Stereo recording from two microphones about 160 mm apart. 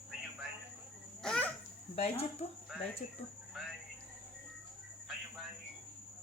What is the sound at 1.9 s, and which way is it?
Speech, 40° left (ahead or behind).